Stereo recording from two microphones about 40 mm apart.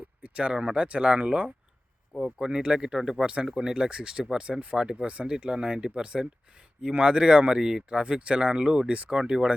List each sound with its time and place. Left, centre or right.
0.2 s a sound: right
0.5 s speech: right
0.8 s speech: right
2.2 s speech: centre
5.0 s speech: right